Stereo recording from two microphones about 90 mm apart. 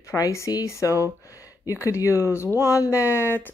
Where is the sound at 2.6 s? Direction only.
35° left (ahead or behind).